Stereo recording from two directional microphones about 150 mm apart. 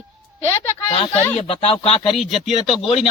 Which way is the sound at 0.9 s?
35° left (ahead or behind).